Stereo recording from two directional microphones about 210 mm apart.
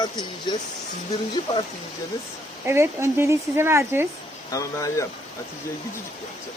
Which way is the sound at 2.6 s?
10° right (ahead or behind).